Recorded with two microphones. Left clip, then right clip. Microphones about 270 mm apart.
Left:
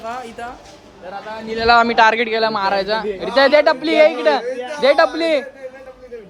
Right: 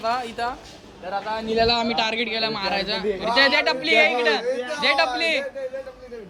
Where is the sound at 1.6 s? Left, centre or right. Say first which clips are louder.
Left 12 dB; centre.